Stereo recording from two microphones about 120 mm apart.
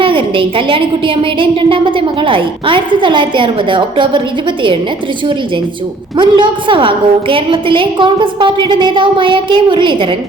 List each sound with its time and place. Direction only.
0.0 s a woman's voice: 45° right (ahead or behind)
6.1 s a woman's voice: 40° right (ahead or behind)